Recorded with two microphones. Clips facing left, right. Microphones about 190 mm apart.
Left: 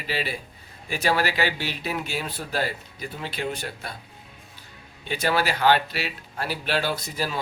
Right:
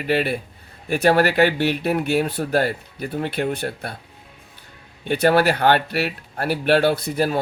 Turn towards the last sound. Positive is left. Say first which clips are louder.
# right 8 dB
turn(degrees=-55)  # may be behind; listen again after turning